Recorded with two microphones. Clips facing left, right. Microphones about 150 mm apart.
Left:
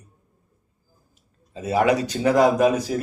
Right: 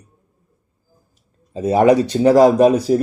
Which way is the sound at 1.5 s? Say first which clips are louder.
Right 7 dB; 35° right (ahead or behind).